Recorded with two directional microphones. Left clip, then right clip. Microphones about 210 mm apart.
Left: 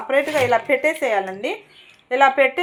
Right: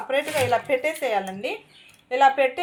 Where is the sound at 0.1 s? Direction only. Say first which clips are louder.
Left 5 dB; 15° left (ahead or behind).